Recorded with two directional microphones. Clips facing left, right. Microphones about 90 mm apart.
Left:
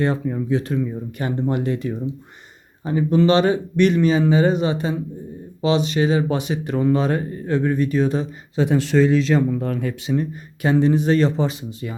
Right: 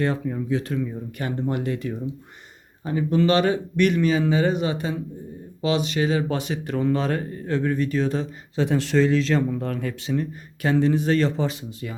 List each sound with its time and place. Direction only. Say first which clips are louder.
0.0 s a man's voice: left 3 dB; 30° left (ahead or behind); by 8.7 s 15° left (ahead or behind)
8.7 s a man's voice: left 3 dB; centre (ahead or behind)
10.1 s speech: left 3 dB; 20° left (ahead or behind)